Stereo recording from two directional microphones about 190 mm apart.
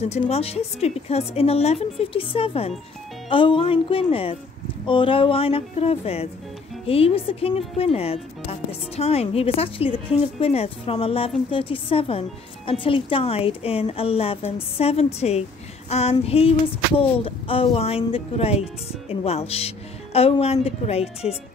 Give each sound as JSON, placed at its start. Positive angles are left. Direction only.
{"t": 0.0, "sound": "speech", "side_deg": 35}